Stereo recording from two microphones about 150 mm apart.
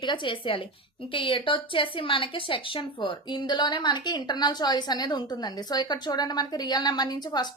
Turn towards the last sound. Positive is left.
turn(degrees=25)  # may be behind; listen again after turning